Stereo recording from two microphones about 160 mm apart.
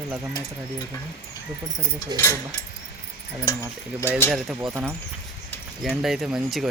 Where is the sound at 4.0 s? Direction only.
15° left (ahead or behind).